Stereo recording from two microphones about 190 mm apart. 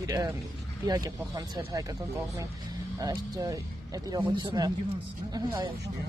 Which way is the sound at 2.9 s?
20° right (ahead or behind).